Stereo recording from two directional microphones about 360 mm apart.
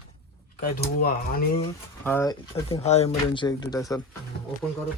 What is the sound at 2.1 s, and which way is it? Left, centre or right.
Speech, centre.